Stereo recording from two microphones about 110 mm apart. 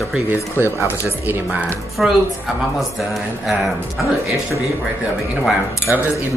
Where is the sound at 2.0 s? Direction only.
5° right (ahead or behind).